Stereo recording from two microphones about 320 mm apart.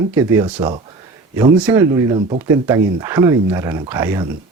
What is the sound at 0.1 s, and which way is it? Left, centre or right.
Speech, centre.